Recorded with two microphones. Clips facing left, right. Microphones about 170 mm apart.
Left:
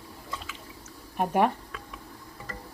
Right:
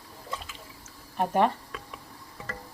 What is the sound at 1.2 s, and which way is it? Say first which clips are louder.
Speech: even; 10° left (ahead or behind).